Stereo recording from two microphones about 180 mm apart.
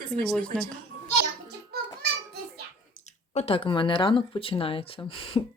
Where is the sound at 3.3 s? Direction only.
35° left (ahead or behind).